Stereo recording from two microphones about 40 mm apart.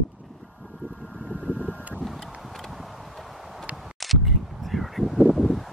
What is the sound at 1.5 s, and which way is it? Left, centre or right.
Vehicle, left.